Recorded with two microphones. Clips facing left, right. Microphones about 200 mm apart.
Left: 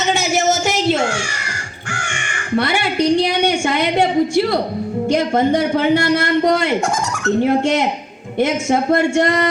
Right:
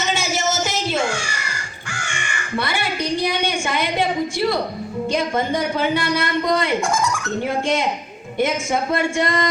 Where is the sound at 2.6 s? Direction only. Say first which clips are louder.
Left 7 dB; 65° left (ahead or behind).